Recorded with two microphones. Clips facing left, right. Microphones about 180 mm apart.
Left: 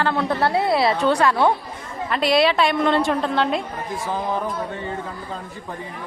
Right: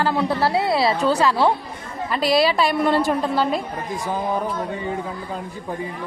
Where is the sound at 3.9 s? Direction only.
15° right (ahead or behind).